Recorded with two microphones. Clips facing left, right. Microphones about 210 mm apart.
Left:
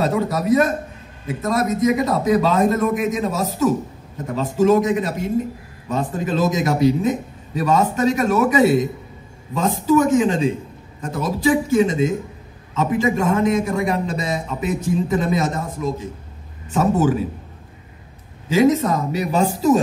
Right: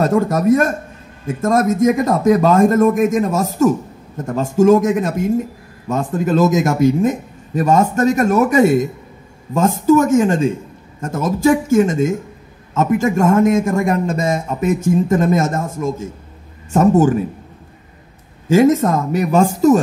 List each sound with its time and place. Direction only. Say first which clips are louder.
0.0 s a man's voice: right 5 dB; 45° right (ahead or behind)
18.5 s a man's voice: right 4 dB; 50° right (ahead or behind)